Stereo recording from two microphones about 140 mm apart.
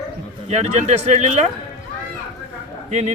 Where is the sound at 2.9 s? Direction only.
55° right (ahead or behind).